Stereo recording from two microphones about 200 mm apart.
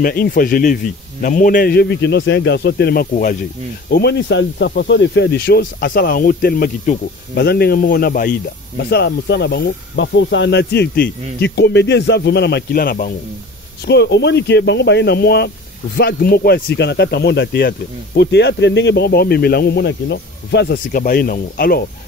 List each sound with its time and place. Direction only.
0.0 s speech: 45° left (ahead or behind)
3.9 s speech: 60° left (ahead or behind)
13.8 s speech: 55° left (ahead or behind)